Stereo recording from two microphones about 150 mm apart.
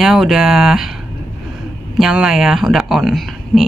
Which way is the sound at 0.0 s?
Centre (ahead or behind).